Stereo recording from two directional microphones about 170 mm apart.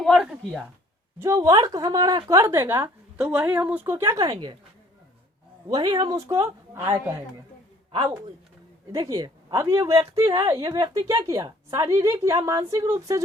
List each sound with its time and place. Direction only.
0.0 s a sound: centre (ahead or behind)
1.2 s a woman's voice: 15° right (ahead or behind)
5.6 s a woman's voice: 25° right (ahead or behind)
7.9 s speech: 30° right (ahead or behind)
8.9 s a woman's voice: 20° right (ahead or behind)